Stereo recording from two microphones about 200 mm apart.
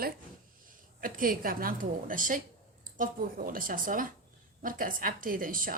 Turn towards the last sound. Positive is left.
turn(degrees=-45)  # may be behind; listen again after turning